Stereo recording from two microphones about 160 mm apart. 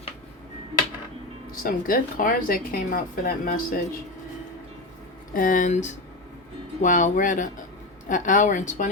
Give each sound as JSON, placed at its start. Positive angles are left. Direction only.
{"t": 1.6, "sound": "speech", "side_deg": 60}
{"t": 5.3, "sound": "a woman's voice", "side_deg": 60}